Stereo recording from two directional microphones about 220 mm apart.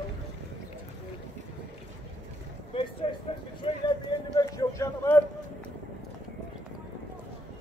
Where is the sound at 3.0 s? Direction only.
25° left (ahead or behind).